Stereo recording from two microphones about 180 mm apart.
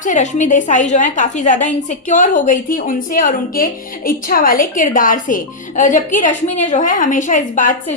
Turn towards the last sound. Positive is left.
turn(degrees=45)  # may be behind; listen again after turning